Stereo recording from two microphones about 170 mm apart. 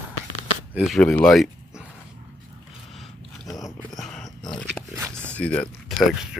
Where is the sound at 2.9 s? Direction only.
Centre (ahead or behind).